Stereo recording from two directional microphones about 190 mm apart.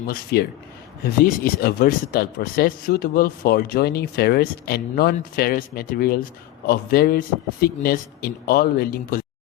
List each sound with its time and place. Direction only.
0.1 s speech: 55° left (ahead or behind)